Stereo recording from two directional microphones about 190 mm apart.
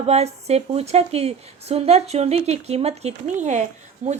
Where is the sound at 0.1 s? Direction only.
35° right (ahead or behind).